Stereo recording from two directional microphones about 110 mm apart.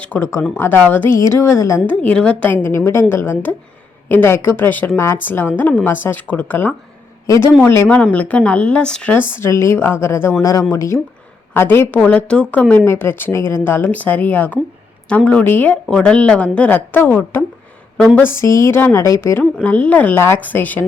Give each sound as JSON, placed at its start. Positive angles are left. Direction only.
{"t": 0.0, "sound": "speech", "side_deg": 15}
{"t": 1.9, "sound": "a woman's voice", "side_deg": 10}
{"t": 9.4, "sound": "speech", "side_deg": 25}
{"t": 10.4, "sound": "a woman's voice", "side_deg": 30}
{"t": 19.6, "sound": "a woman's voice", "side_deg": 10}